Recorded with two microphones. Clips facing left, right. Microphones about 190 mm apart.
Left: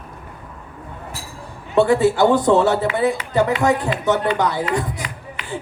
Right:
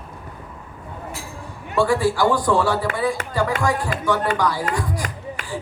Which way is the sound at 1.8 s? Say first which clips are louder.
Left 4 dB; 25° left (ahead or behind).